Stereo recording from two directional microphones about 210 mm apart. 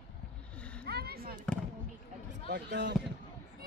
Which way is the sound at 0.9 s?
50° right (ahead or behind).